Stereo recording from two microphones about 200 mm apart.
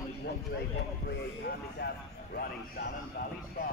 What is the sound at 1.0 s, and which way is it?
Speech, 55° left (ahead or behind).